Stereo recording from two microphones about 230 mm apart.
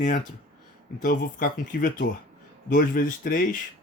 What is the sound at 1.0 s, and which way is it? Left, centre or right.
Speech, left.